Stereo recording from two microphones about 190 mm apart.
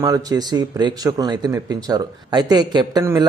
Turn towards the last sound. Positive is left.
turn(degrees=-15)  # may be behind; listen again after turning